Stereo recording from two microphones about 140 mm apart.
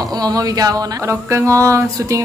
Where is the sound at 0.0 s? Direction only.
30° right (ahead or behind).